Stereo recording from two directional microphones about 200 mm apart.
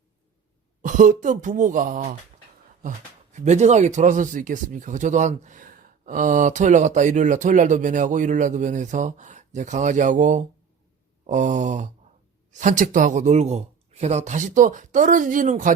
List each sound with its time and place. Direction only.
0.8 s speech: 40° right (ahead or behind)
3.3 s speech: 35° right (ahead or behind)